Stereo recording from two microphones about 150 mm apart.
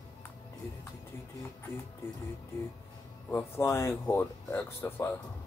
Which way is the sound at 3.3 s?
15° left (ahead or behind).